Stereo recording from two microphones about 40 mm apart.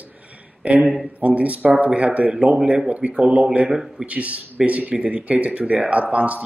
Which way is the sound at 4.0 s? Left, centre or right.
Right.